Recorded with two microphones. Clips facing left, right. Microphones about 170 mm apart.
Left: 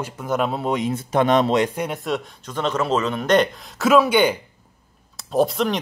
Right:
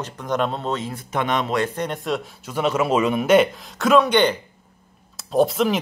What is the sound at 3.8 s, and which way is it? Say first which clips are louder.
Speech: even; 5° left (ahead or behind).